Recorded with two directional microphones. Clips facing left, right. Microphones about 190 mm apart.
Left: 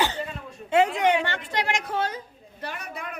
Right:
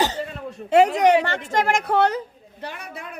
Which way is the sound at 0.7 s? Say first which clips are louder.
Right 5 dB; 40° right (ahead or behind).